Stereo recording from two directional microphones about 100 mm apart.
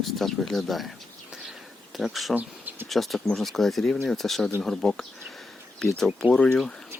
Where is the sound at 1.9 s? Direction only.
Centre (ahead or behind).